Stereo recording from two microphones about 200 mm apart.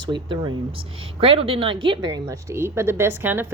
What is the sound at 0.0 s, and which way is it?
A woman's voice, 25° right (ahead or behind).